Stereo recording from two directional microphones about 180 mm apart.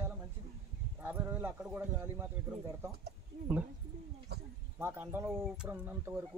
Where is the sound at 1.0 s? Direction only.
10° right (ahead or behind).